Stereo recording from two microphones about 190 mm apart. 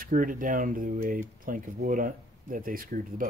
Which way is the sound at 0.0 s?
45° right (ahead or behind).